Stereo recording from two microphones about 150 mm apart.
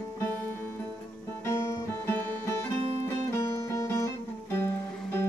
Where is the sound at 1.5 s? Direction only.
15° left (ahead or behind).